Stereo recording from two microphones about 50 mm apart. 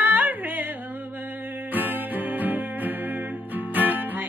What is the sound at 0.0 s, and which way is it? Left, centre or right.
Music, right.